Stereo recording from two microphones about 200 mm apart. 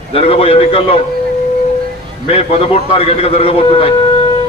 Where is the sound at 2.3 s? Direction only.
30° left (ahead or behind).